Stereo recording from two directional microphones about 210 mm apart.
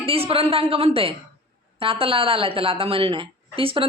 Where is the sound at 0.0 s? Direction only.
30° right (ahead or behind).